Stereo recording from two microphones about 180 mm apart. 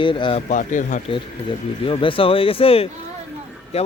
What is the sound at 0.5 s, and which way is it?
Speech, 45° left (ahead or behind).